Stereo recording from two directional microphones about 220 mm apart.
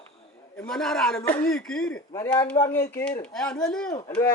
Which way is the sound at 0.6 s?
5° left (ahead or behind).